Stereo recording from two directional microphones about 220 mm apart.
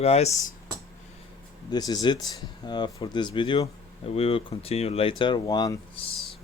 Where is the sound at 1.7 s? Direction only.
20° left (ahead or behind).